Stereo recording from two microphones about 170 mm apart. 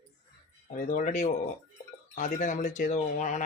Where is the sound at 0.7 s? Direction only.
45° left (ahead or behind).